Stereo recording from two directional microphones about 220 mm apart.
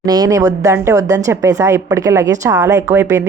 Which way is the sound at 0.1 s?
15° right (ahead or behind).